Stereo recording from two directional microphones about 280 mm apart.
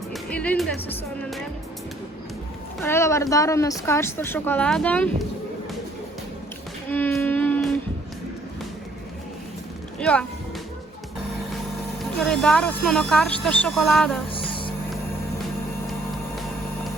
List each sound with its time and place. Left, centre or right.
0.1 s music: centre
2.8 s speech: centre
6.9 s music: centre
10.0 s speech: centre
12.2 s speech: centre
14.3 s music: centre